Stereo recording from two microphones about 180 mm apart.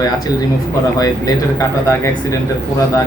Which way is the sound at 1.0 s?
20° left (ahead or behind).